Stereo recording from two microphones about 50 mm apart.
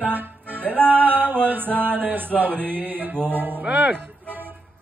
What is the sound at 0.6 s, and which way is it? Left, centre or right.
Music, left.